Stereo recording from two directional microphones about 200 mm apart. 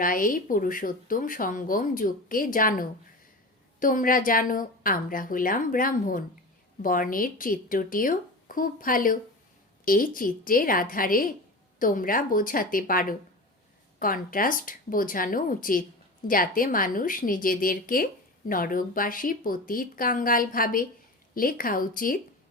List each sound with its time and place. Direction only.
0.0 s a woman's voice: 45° left (ahead or behind)